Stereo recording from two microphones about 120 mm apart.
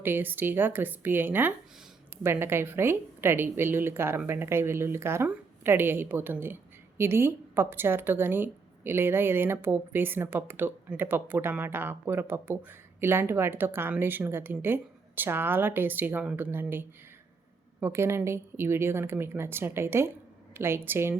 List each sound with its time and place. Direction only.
0.0 s speech: 15° right (ahead or behind)